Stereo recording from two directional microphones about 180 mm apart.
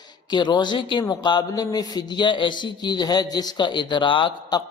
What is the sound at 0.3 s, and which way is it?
A man's voice, 25° left (ahead or behind).